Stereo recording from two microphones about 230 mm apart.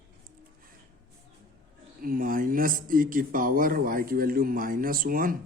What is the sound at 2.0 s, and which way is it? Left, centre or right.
Speech, right.